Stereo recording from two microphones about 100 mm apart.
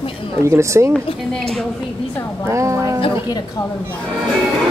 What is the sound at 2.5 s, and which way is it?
Speech, 30° right (ahead or behind).